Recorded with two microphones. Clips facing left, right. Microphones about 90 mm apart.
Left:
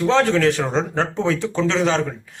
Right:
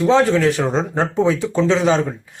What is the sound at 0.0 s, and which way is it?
A man's voice, 10° right (ahead or behind).